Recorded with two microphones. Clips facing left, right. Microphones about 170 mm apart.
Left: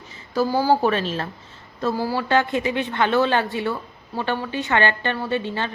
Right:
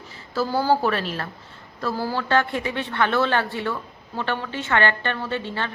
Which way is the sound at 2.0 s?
10° left (ahead or behind).